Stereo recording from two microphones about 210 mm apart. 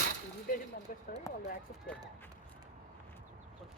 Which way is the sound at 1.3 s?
15° left (ahead or behind).